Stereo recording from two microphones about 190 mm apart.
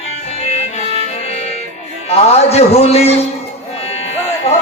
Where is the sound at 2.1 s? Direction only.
35° left (ahead or behind).